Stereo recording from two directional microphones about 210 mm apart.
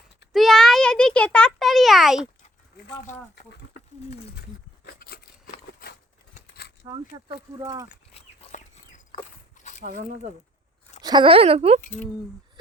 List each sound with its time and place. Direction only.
0.3 s a sound: centre (ahead or behind)
4.9 s a sound: 50° left (ahead or behind)
6.8 s speech: 20° right (ahead or behind)
8.1 s chicken: 30° left (ahead or behind)
9.8 s speech: 40° right (ahead or behind)
11.0 s speech: 20° right (ahead or behind)